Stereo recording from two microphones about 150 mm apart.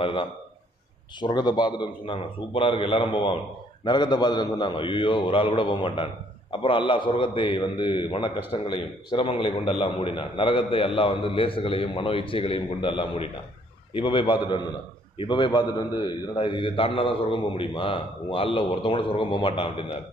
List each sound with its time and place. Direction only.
0.0 s a man's voice: 35° left (ahead or behind)